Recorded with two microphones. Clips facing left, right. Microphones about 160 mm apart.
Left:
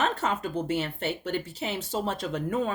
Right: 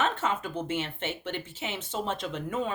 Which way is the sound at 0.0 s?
40° left (ahead or behind).